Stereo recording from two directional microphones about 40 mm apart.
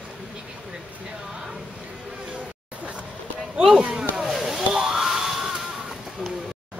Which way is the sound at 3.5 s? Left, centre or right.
Centre.